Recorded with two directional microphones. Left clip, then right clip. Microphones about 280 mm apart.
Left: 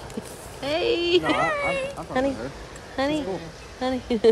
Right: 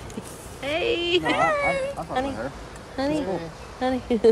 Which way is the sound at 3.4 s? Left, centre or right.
Centre.